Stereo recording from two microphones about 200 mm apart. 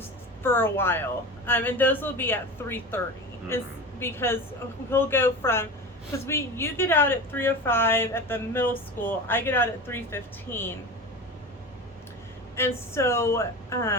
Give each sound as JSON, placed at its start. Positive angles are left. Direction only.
{"t": 0.4, "sound": "a woman's voice", "side_deg": 10}
{"t": 4.0, "sound": "a woman's voice", "side_deg": 10}
{"t": 12.5, "sound": "a woman's voice", "side_deg": 15}